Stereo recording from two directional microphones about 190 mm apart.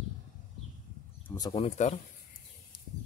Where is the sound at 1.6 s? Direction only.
35° left (ahead or behind).